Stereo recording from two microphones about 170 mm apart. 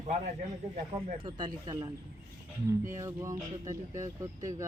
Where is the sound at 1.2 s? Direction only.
25° right (ahead or behind).